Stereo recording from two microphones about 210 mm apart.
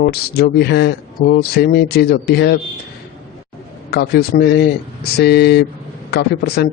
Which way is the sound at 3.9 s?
50° left (ahead or behind).